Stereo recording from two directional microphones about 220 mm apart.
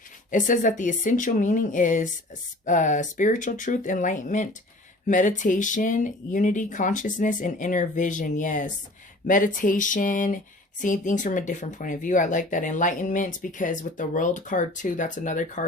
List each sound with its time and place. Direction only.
0.3 s speech: 35° left (ahead or behind)